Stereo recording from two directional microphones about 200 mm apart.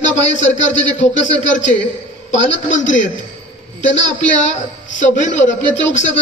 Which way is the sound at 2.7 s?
40° left (ahead or behind).